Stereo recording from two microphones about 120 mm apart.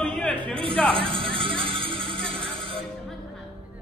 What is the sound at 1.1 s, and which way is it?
Music, 45° right (ahead or behind).